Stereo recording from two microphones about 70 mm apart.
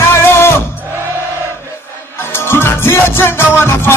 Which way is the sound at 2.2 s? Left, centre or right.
Left.